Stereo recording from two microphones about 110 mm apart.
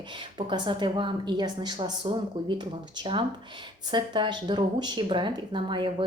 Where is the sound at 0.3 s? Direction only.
45° right (ahead or behind).